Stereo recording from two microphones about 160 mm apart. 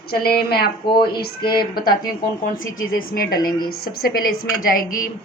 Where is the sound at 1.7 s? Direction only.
70° left (ahead or behind).